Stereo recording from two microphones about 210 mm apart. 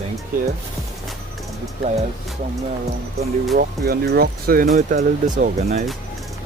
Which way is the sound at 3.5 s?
50° right (ahead or behind).